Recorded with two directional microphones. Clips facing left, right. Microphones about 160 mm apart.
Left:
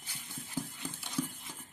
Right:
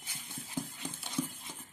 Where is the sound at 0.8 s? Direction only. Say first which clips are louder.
Even; 25° right (ahead or behind).